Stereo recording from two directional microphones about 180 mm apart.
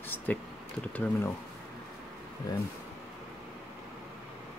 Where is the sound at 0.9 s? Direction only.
10° left (ahead or behind).